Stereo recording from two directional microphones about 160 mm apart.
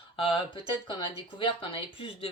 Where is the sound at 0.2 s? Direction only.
30° left (ahead or behind).